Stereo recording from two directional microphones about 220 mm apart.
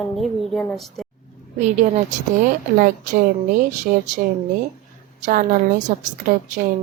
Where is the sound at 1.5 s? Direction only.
30° right (ahead or behind).